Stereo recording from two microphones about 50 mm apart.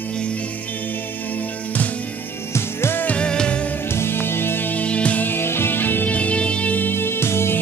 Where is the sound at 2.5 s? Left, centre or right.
Left.